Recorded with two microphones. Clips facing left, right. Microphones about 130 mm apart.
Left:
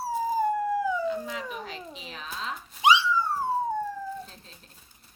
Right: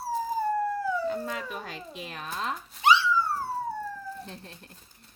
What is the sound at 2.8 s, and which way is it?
Dog, 15° left (ahead or behind).